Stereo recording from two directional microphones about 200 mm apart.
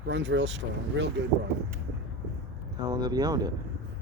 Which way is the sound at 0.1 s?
65° right (ahead or behind).